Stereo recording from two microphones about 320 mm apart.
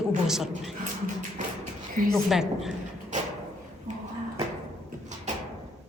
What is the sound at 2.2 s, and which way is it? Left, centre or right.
Speech, centre.